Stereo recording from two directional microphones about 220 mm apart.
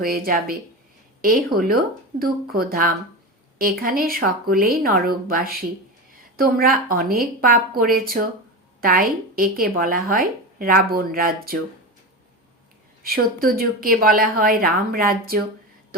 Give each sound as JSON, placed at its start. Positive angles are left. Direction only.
{"t": 0.0, "sound": "a woman's voice", "side_deg": -40}
{"t": 13.0, "sound": "a woman's voice", "side_deg": -40}